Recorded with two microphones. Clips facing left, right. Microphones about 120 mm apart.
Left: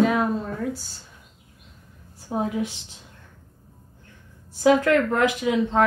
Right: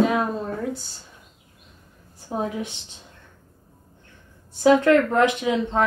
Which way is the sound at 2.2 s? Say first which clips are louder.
Left 1 dB; 5° left (ahead or behind).